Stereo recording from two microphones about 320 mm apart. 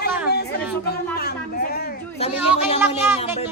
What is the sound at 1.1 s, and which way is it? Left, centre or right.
A woman's voice, left.